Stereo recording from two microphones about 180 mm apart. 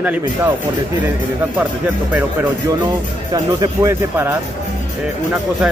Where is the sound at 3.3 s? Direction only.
20° right (ahead or behind).